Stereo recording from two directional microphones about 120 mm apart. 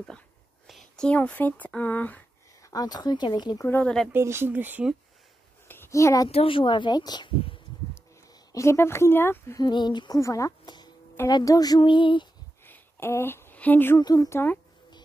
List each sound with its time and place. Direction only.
0.7 s speech: 5° left (ahead or behind)
2.6 s speech: 30° left (ahead or behind)
3.6 s speech: 10° left (ahead or behind)
4.1 s speech: 20° right (ahead or behind)
5.7 s a sound: 20° left (ahead or behind)
6.3 s a woman's voice: 50° left (ahead or behind)
8.5 s speech: 25° left (ahead or behind)
9.6 s speech: 40° left (ahead or behind)
10.6 s music: 35° left (ahead or behind)
11.2 s speech: 30° left (ahead or behind)
11.8 s a woman's voice: 45° left (ahead or behind)
12.6 s a sound: 20° left (ahead or behind)
13.9 s speech: 30° left (ahead or behind)